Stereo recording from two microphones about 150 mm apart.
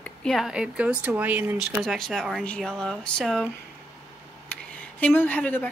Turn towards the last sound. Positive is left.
turn(degrees=10)  # may be behind; listen again after turning